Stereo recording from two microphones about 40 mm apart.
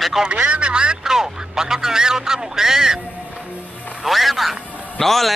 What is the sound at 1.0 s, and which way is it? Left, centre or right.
A man's voice, centre.